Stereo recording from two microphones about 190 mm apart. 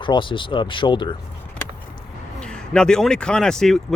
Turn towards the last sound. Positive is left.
turn(degrees=0)  # may be behind; listen again after turning